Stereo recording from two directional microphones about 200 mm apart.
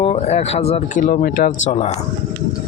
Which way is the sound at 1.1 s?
45° left (ahead or behind).